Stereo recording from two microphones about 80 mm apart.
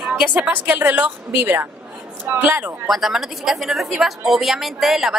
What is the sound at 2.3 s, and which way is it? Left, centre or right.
Speech, right.